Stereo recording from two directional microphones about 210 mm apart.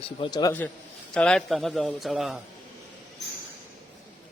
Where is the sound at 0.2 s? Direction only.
20° left (ahead or behind).